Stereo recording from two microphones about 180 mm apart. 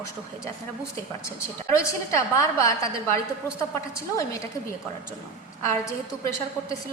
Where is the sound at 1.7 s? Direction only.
15° left (ahead or behind).